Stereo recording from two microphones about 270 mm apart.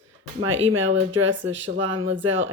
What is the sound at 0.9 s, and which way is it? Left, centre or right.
Speech, right.